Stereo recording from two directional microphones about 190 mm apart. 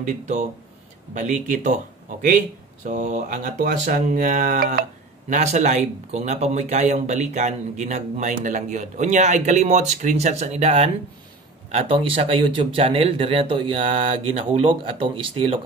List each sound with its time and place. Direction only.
0.0 s speech: 40° right (ahead or behind)
5.3 s speech: 40° right (ahead or behind)